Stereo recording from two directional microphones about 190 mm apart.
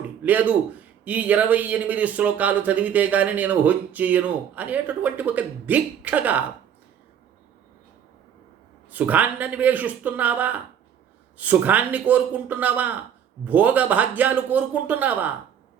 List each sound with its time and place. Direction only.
0.2 s speech: 10° right (ahead or behind)
8.9 s speech: 10° right (ahead or behind)